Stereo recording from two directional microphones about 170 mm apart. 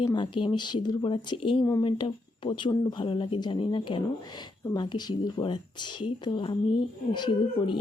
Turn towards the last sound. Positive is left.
turn(degrees=25)  # may be behind; listen again after turning